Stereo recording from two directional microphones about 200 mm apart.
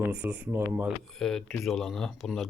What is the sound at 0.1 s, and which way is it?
Speech, 5° right (ahead or behind).